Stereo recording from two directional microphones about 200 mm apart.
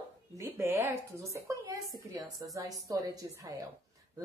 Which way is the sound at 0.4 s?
15° right (ahead or behind).